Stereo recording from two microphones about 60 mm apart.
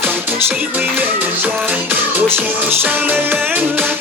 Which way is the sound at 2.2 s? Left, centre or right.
Right.